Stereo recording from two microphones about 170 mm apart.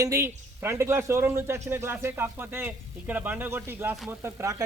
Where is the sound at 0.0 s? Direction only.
15° right (ahead or behind).